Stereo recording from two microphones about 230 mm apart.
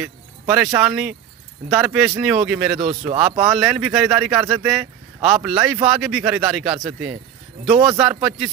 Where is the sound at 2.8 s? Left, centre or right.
Right.